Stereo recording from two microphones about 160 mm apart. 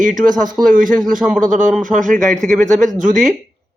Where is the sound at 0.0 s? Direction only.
55° right (ahead or behind).